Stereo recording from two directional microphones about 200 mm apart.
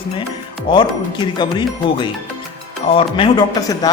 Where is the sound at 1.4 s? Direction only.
25° left (ahead or behind).